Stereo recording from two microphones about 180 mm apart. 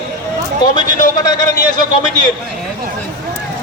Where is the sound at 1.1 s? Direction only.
20° left (ahead or behind).